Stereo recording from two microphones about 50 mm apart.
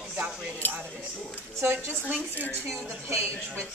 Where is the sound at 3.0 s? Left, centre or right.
Right.